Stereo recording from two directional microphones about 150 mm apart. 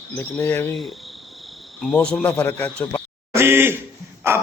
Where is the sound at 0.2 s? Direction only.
15° left (ahead or behind).